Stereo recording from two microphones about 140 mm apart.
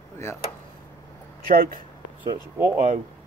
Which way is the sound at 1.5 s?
90° right.